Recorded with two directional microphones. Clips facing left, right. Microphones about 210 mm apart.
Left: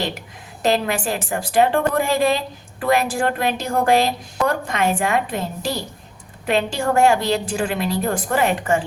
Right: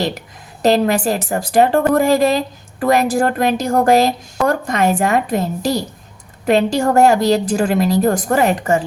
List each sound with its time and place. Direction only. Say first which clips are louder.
0.6 s a woman's voice: right 6 dB; 40° right (ahead or behind)